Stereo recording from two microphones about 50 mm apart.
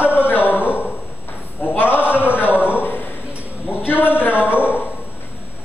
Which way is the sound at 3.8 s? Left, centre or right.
Left.